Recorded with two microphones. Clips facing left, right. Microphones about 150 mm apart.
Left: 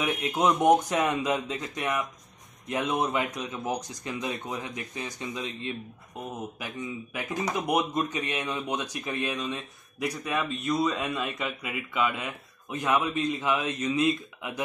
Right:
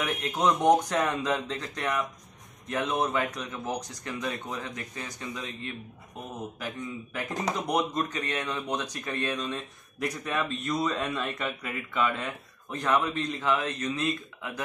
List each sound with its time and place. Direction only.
0.0 s speech: 10° left (ahead or behind)